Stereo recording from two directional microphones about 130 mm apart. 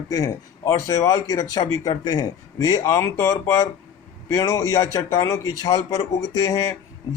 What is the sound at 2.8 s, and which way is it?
Speech, 20° left (ahead or behind).